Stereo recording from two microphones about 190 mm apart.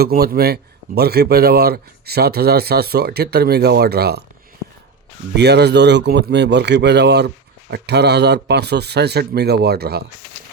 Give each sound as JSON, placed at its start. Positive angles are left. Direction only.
{"t": 0.0, "sound": "a man's voice", "side_deg": -55}
{"t": 5.4, "sound": "a man's voice", "side_deg": -60}